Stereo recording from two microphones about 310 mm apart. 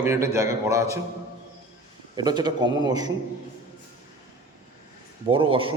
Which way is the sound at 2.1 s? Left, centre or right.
Centre.